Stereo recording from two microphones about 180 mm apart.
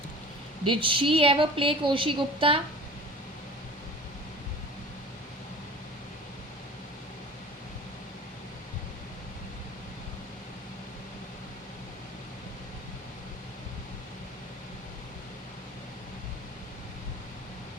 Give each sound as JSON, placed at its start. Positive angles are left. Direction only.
{"t": 0.7, "sound": "a woman's voice", "side_deg": -30}